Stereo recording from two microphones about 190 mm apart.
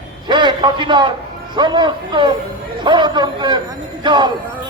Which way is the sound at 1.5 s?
25° right (ahead or behind).